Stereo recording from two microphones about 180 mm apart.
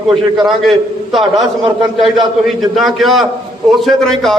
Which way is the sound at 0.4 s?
Centre (ahead or behind).